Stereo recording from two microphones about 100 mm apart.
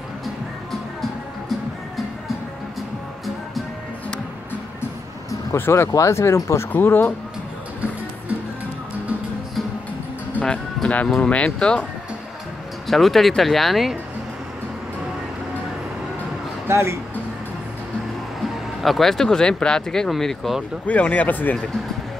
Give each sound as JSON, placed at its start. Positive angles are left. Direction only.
{"t": 5.5, "sound": "speech", "side_deg": 30}
{"t": 10.3, "sound": "music", "side_deg": 10}
{"t": 11.1, "sound": "speech", "side_deg": 10}
{"t": 12.8, "sound": "speech", "side_deg": 0}
{"t": 16.6, "sound": "speech", "side_deg": -25}
{"t": 18.8, "sound": "speech", "side_deg": 0}
{"t": 20.8, "sound": "speech", "side_deg": 15}